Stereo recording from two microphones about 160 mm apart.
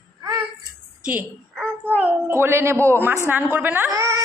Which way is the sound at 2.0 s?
15° right (ahead or behind).